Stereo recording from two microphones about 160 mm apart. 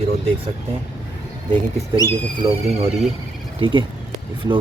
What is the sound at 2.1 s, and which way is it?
Speech, 40° right (ahead or behind).